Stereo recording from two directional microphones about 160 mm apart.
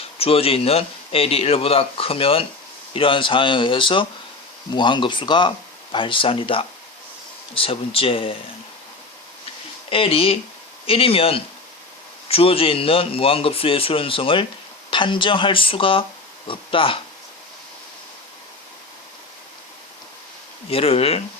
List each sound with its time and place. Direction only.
0.0 s speech: 35° left (ahead or behind)
9.9 s speech: 35° left (ahead or behind)
20.7 s speech: 35° left (ahead or behind)